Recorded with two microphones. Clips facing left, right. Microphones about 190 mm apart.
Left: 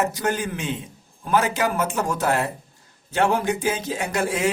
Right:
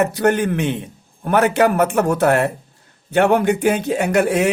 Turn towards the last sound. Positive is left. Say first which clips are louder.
# right 8 dB
turn(degrees=-65)  # may be behind; listen again after turning